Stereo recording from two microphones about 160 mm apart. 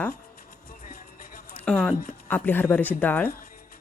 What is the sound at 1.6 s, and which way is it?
A woman's voice, 5° left (ahead or behind).